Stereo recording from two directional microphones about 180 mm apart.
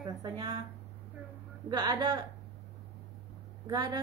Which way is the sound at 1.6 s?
20° right (ahead or behind).